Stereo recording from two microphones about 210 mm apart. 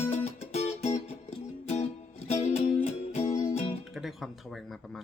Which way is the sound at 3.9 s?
Centre (ahead or behind).